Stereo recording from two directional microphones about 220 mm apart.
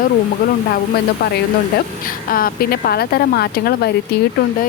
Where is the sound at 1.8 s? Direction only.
40° left (ahead or behind).